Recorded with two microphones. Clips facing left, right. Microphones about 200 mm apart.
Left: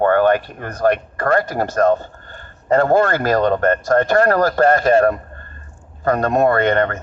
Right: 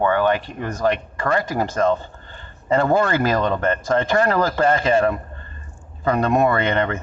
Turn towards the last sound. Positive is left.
turn(degrees=50)  # may be behind; listen again after turning